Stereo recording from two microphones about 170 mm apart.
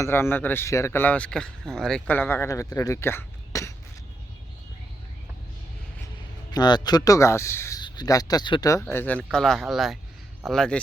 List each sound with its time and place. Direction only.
0.0 s speech: 15° left (ahead or behind)
6.5 s speech: 25° left (ahead or behind)
8.8 s speech: 10° left (ahead or behind)